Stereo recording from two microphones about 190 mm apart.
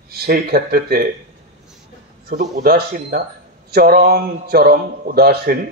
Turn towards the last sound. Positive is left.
turn(degrees=-55)  # may be behind; listen again after turning